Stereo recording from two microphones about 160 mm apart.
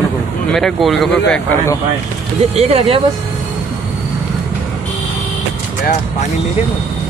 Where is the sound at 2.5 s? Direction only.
40° right (ahead or behind).